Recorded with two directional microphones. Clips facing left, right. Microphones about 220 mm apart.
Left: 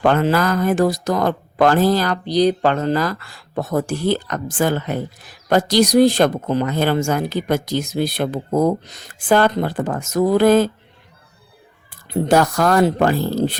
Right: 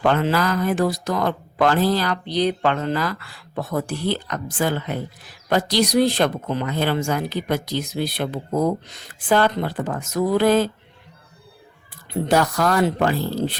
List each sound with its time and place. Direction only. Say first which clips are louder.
0.0 s speech: left 3 dB; 45° left (ahead or behind)
12.3 s speech: left 4 dB; 45° left (ahead or behind)